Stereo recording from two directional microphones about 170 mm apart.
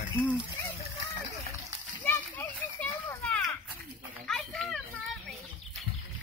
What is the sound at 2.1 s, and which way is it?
Children playing, 10° left (ahead or behind).